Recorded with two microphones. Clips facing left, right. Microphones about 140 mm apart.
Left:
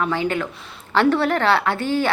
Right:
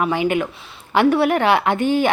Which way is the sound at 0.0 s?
15° right (ahead or behind).